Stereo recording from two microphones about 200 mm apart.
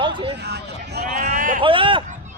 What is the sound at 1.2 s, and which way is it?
Speech, 40° right (ahead or behind).